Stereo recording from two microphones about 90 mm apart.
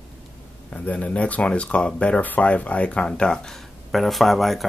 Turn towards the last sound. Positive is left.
turn(degrees=0)  # may be behind; listen again after turning